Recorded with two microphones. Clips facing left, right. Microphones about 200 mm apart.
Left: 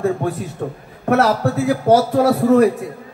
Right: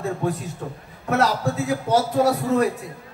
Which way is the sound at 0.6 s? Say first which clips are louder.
Left 8 dB; 60° left (ahead or behind).